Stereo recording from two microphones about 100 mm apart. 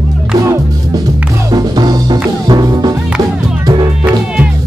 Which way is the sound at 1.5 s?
40° right (ahead or behind).